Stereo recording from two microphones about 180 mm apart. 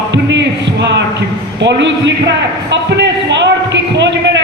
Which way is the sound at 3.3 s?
80° right.